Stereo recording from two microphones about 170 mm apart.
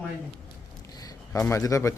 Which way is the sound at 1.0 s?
20° left (ahead or behind).